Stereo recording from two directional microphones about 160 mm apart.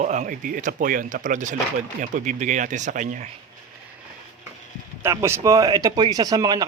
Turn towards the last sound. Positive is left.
turn(degrees=-25)  # may be behind; listen again after turning